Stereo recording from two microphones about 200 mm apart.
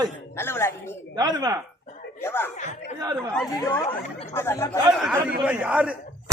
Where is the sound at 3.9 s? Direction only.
30° left (ahead or behind).